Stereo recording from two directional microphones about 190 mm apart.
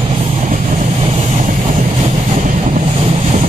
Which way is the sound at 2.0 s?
40° right (ahead or behind).